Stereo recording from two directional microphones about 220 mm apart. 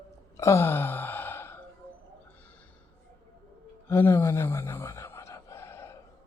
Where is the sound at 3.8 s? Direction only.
10° left (ahead or behind).